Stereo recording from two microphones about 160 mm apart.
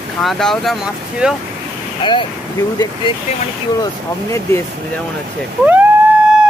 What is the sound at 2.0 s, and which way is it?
Speech, 30° left (ahead or behind).